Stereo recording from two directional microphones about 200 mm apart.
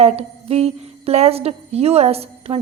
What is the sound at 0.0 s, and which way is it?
A woman's voice, 30° right (ahead or behind).